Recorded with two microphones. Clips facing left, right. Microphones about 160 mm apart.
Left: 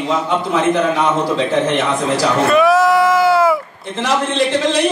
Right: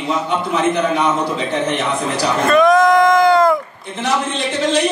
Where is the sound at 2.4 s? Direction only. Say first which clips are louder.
Right 2 dB; 5° left (ahead or behind).